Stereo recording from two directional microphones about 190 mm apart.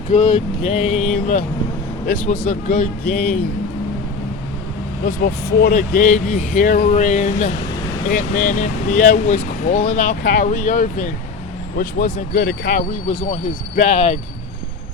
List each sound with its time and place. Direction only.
0.1 s speech: 40° left (ahead or behind)
2.5 s speech: 45° left (ahead or behind)
5.0 s speech: 50° left (ahead or behind)